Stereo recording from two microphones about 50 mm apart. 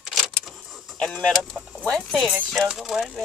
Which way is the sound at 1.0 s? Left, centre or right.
Centre.